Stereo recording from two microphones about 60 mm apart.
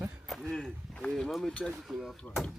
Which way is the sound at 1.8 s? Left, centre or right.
Centre.